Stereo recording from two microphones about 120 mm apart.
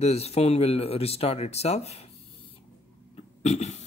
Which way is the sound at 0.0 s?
60° left (ahead or behind).